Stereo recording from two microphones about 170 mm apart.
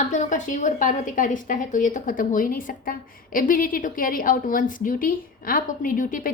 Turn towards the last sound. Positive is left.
turn(degrees=50)  # may be behind; listen again after turning